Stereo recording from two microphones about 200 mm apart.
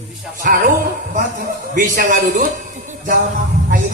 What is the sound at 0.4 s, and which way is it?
Speech, 45° right (ahead or behind).